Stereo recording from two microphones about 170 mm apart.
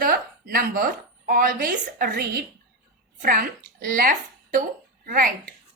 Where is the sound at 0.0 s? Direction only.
60° right (ahead or behind).